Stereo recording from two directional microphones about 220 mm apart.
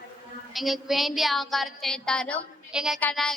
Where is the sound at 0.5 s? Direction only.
Centre (ahead or behind).